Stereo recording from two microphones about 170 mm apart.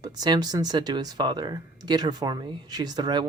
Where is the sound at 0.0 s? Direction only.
25° right (ahead or behind).